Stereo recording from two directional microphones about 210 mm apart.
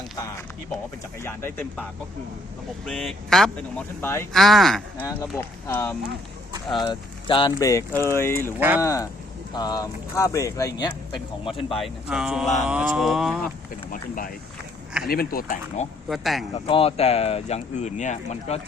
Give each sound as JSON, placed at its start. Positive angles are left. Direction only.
{"t": 1.2, "sound": "speech", "side_deg": 10}
{"t": 2.8, "sound": "speech", "side_deg": 0}
{"t": 4.4, "sound": "speech", "side_deg": 0}
{"t": 6.7, "sound": "speech", "side_deg": 20}
{"t": 8.5, "sound": "speech", "side_deg": -10}
{"t": 8.8, "sound": "speech", "side_deg": 15}
{"t": 11.8, "sound": "speech", "side_deg": -5}
{"t": 15.0, "sound": "speech", "side_deg": 45}
{"t": 16.0, "sound": "speech", "side_deg": 0}
{"t": 16.6, "sound": "speech", "side_deg": 25}